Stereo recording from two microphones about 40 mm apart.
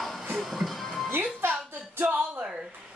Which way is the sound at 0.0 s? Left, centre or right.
Centre.